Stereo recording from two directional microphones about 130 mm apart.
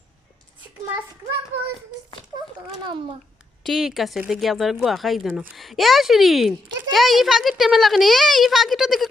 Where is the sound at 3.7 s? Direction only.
Centre (ahead or behind).